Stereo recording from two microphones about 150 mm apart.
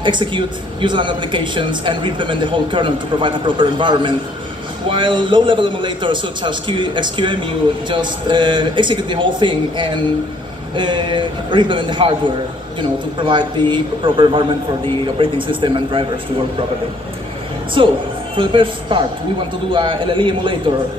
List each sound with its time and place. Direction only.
0.0 s speech: 30° right (ahead or behind)
13.2 s speech: 30° right (ahead or behind)
17.8 s speech: 35° right (ahead or behind)